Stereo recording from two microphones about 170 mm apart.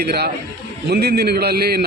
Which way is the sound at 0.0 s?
70° right (ahead or behind).